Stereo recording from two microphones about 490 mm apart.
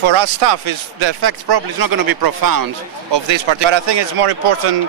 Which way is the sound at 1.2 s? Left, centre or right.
Right.